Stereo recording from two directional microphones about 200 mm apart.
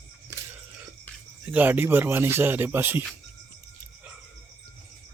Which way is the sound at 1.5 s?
10° right (ahead or behind).